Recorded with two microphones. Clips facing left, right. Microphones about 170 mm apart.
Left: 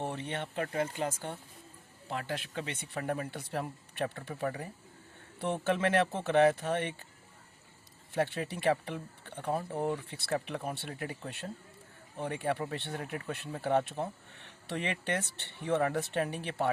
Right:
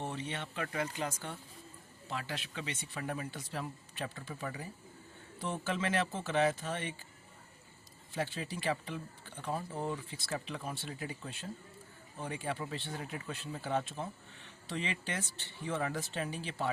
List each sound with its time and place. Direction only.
0.1 s speech: 55° left (ahead or behind)
8.1 s speech: 60° left (ahead or behind)